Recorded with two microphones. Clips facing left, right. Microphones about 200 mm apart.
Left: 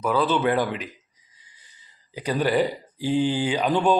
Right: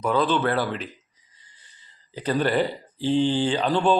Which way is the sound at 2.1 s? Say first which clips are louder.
Even; 10° left (ahead or behind).